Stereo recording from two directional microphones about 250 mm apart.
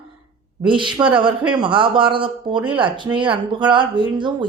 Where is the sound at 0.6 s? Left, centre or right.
Centre.